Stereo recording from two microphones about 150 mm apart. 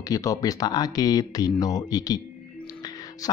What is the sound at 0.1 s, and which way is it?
Speech, 25° left (ahead or behind).